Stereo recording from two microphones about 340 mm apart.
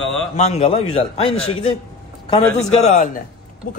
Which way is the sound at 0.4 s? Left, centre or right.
Centre.